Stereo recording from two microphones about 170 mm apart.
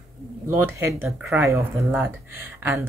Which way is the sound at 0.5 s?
10° right (ahead or behind).